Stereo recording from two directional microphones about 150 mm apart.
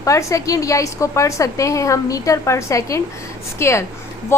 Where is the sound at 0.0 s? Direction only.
20° left (ahead or behind).